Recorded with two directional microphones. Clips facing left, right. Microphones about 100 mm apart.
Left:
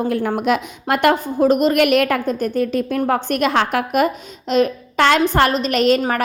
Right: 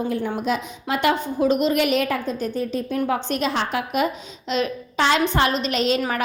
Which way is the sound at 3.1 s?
55° left (ahead or behind).